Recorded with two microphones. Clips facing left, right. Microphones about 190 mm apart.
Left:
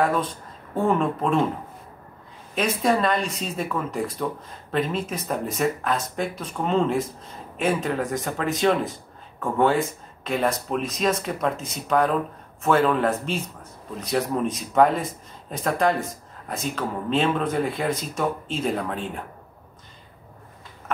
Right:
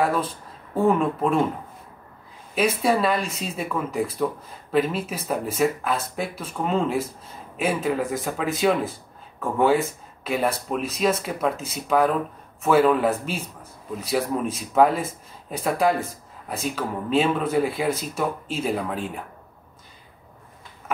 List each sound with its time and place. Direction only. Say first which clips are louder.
0.0 s speech: even; 5° right (ahead or behind)
2.5 s speech: right 1 dB; 5° right (ahead or behind)